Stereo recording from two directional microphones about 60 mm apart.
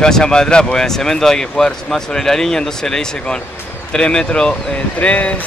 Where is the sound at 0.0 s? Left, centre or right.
Centre.